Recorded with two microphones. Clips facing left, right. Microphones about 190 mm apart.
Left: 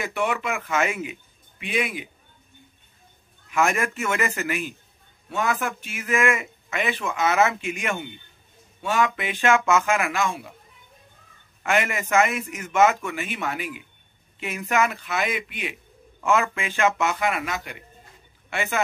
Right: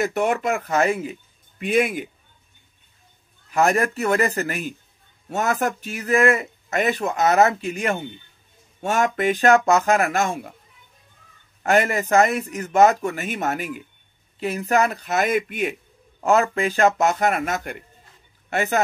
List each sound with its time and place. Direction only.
0.0 s speech: 45° right (ahead or behind)
3.4 s speech: 35° right (ahead or behind)
11.6 s speech: 40° right (ahead or behind)